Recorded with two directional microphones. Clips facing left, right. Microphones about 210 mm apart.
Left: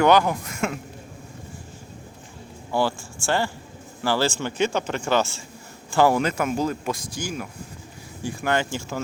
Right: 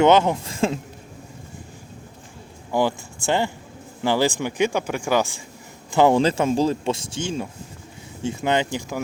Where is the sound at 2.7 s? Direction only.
20° right (ahead or behind).